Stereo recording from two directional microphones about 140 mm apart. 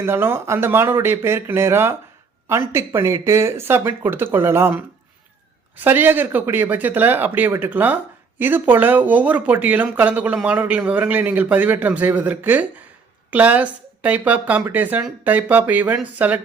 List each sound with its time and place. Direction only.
0.0 s speech: 15° right (ahead or behind)